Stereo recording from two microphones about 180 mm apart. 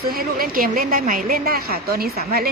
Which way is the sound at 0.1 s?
55° right (ahead or behind).